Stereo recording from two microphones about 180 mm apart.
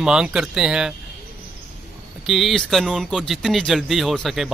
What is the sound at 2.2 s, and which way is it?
Speech, centre (ahead or behind).